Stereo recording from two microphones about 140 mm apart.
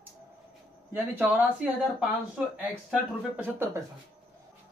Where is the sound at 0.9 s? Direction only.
15° right (ahead or behind).